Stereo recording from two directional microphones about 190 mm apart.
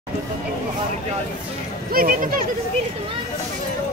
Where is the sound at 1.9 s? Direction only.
50° right (ahead or behind).